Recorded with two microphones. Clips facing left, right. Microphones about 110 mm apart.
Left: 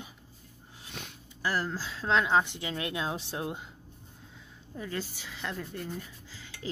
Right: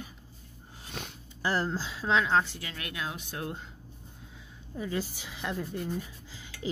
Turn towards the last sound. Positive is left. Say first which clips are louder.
# right 2 dB
turn(degrees=-15)  # may be behind; listen again after turning